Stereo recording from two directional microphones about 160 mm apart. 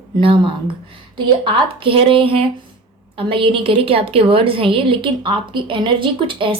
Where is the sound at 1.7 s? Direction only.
35° right (ahead or behind).